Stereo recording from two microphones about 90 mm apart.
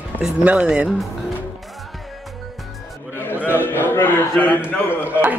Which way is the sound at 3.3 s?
20° right (ahead or behind).